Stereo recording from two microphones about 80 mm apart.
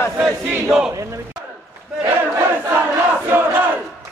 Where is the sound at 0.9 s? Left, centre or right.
Right.